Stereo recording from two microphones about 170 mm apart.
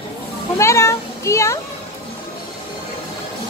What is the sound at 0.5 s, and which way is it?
A child's voice, 15° left (ahead or behind).